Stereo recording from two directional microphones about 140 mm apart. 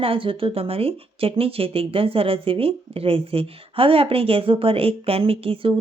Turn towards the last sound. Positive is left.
turn(degrees=-40)  # may be behind; listen again after turning